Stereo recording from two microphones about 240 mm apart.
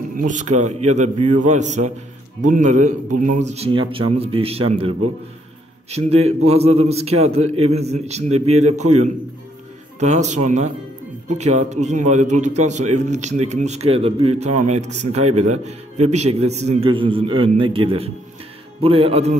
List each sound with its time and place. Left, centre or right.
0.1 s a man's voice: right
9.9 s a man's voice: right